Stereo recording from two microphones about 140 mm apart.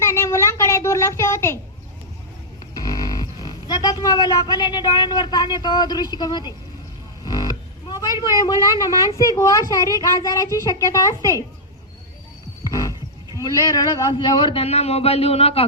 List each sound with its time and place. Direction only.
0.0 s a sound: 20° left (ahead or behind)
2.7 s music: 25° left (ahead or behind)
5.5 s speech: 30° left (ahead or behind)
7.3 s music: 30° left (ahead or behind)
8.6 s a child's voice: 25° left (ahead or behind)
12.6 s music: 25° left (ahead or behind)
13.4 s a man's voice: 25° left (ahead or behind); by 15.6 s 45° left (ahead or behind)